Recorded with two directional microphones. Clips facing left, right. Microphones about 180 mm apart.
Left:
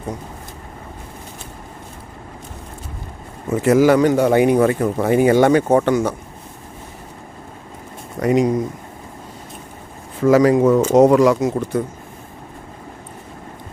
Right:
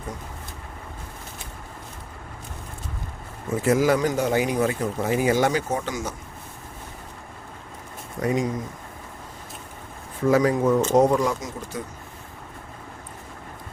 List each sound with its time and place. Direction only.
3.6 s speech: 70° left (ahead or behind)
8.2 s speech: 70° left (ahead or behind)
10.2 s speech: 85° left; by 11.8 s 60° left (ahead or behind)